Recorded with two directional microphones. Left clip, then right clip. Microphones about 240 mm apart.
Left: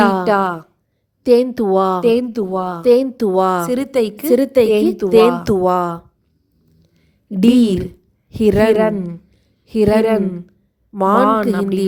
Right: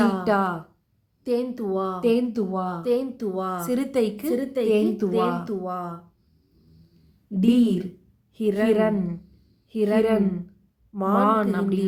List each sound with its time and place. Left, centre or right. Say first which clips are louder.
0.0 s a sound: left 8 dB; left
1.2 s speech: left 13 dB; left
7.3 s speech: left 8 dB; left